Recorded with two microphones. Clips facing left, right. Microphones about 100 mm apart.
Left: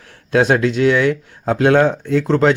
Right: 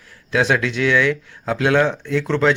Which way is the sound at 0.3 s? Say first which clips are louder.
Left 4 dB; 45° left (ahead or behind).